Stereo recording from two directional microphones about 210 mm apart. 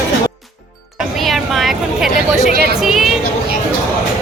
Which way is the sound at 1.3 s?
Centre (ahead or behind).